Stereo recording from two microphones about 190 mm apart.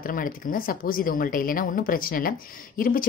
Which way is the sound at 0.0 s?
45° left (ahead or behind).